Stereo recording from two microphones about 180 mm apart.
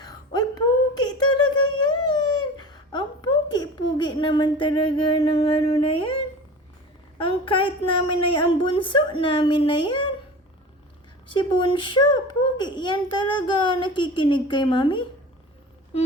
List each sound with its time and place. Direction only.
0.0 s a sound: 20° left (ahead or behind)
7.2 s a child's voice: 30° left (ahead or behind)
11.3 s a child's voice: 25° left (ahead or behind)